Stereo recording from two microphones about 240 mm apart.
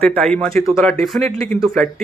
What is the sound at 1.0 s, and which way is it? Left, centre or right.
Speech, centre.